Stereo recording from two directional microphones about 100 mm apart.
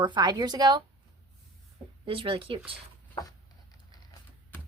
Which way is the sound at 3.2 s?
40° left (ahead or behind).